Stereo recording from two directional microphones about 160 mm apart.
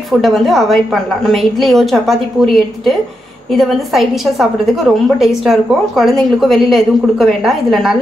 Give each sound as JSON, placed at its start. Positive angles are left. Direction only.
{"t": 0.1, "sound": "a woman's voice", "side_deg": 0}